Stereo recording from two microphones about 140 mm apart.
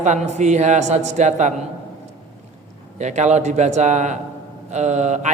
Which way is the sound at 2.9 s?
55° right (ahead or behind).